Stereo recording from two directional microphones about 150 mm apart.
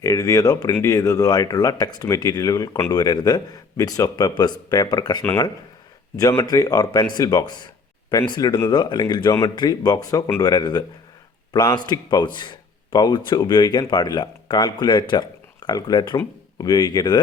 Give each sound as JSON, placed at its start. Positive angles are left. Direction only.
{"t": 0.0, "sound": "a man's voice", "side_deg": 20}